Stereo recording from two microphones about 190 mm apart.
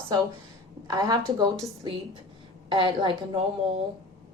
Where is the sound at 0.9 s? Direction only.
20° right (ahead or behind).